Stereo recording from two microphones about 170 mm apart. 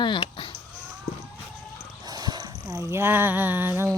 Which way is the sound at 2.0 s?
25° right (ahead or behind).